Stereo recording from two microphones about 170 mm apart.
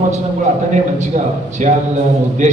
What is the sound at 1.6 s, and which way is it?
Speech, 40° right (ahead or behind).